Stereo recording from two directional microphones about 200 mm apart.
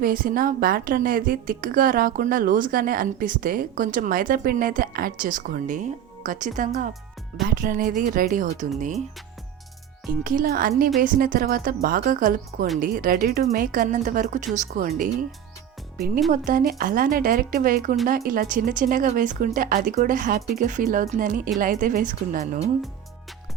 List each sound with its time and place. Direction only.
0.0 s a woman's voice: 45° right (ahead or behind)
10.1 s a woman's voice: 45° right (ahead or behind)